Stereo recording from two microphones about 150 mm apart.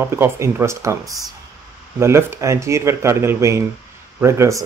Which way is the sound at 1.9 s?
15° right (ahead or behind).